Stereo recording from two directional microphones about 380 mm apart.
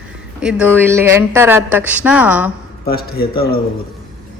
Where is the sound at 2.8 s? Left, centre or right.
Left.